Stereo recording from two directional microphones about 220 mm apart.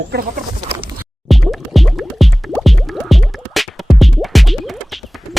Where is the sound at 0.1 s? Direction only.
40° right (ahead or behind).